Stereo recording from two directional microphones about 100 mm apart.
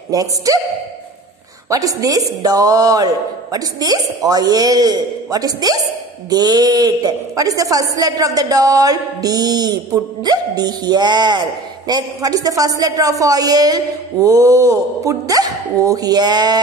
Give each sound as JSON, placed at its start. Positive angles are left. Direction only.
{"t": 0.1, "sound": "a man's voice", "side_deg": -35}
{"t": 1.7, "sound": "a man's voice", "side_deg": -35}